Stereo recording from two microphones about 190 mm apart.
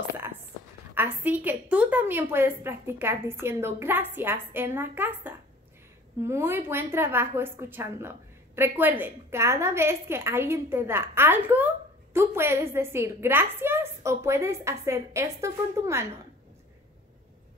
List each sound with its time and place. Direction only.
0.9 s a woman's voice: 10° right (ahead or behind)